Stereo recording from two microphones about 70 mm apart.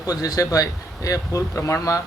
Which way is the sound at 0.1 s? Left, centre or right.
Left.